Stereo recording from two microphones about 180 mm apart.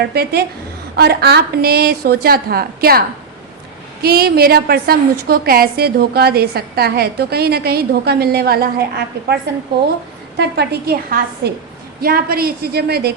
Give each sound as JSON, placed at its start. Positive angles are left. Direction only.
{"t": 0.0, "sound": "a woman's voice", "side_deg": -65}
{"t": 4.0, "sound": "a woman's voice", "side_deg": -60}
{"t": 10.3, "sound": "a woman's voice", "side_deg": -65}